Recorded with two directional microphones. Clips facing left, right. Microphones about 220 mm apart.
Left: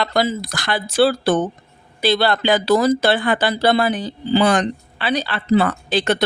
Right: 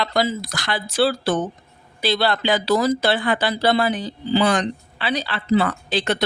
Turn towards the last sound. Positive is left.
turn(degrees=50)  # may be behind; listen again after turning